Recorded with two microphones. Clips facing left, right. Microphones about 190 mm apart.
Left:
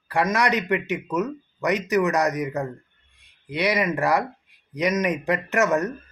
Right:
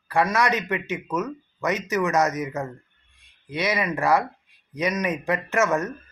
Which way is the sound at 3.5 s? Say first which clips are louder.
Left 2 dB; 15° left (ahead or behind).